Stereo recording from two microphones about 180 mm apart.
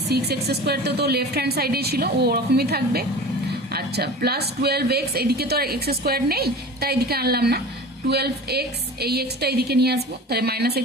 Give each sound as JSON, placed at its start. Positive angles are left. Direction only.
{"t": 0.1, "sound": "speech", "side_deg": -65}